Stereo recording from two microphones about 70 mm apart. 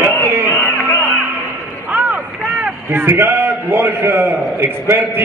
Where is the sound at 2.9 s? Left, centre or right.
Right.